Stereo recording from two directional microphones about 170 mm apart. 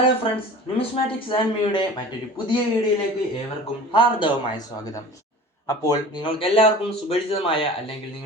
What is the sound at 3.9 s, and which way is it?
A man's voice, 30° left (ahead or behind).